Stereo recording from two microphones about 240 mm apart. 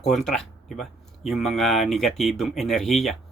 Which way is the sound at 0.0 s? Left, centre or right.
Centre.